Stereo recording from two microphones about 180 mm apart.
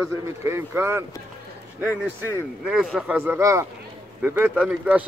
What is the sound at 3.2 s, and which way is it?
Speech, 15° right (ahead or behind).